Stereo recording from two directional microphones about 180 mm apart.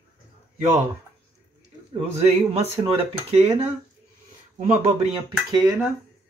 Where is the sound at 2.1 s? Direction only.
35° right (ahead or behind).